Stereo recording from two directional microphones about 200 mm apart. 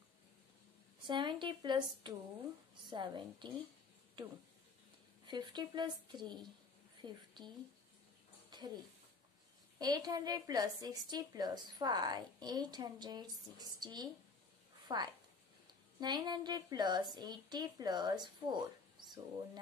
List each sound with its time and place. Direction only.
1.0 s a woman's voice: 25° right (ahead or behind)
5.2 s a woman's voice: 20° right (ahead or behind)
8.5 s a sound: 20° right (ahead or behind)
9.8 s a woman's voice: 20° right (ahead or behind)